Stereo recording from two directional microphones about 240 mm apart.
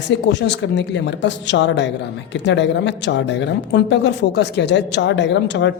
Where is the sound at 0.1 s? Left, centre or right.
Left.